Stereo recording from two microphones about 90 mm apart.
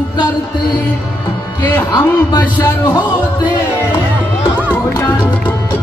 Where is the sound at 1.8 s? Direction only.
50° left (ahead or behind).